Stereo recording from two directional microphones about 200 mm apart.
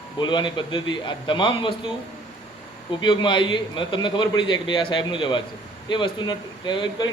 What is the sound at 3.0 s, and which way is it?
A man's voice, 25° left (ahead or behind).